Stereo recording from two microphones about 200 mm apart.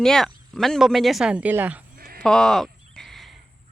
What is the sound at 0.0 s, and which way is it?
A woman's voice, centre (ahead or behind).